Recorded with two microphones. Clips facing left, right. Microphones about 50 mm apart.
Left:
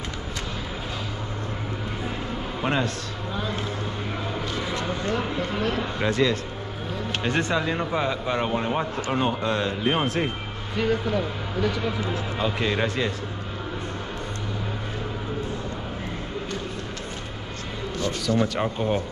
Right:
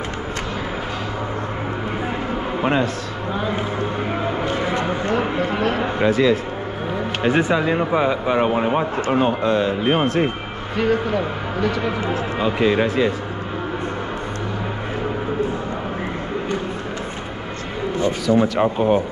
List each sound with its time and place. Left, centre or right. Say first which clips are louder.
2.6 s speech: right 5 dB; centre
3.3 s a sound: right 6 dB; right
4.2 s music: right 7 dB; right
6.0 s speech: right 6 dB; centre
11.1 s speech: right 4 dB; right
12.4 s speech: right 7 dB; centre
18.3 s speech: right 7 dB; centre